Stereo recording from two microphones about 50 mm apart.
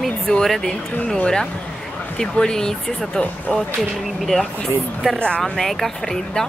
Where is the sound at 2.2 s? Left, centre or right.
Centre.